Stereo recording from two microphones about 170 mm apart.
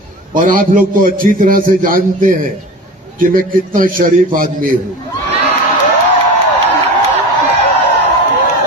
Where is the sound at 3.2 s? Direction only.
55° right (ahead or behind).